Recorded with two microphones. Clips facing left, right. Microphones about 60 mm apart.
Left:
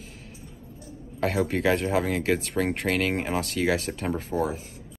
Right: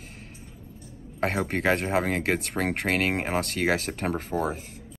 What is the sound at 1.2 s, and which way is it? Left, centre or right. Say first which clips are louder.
Speech: left 1 dB; right.